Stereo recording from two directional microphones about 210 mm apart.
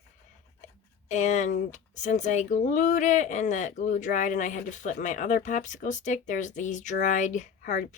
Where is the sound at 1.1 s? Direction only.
35° left (ahead or behind).